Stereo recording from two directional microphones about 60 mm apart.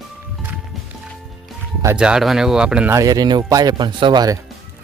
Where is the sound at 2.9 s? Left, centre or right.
Right.